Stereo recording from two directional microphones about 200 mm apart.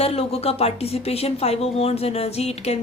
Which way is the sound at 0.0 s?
30° left (ahead or behind).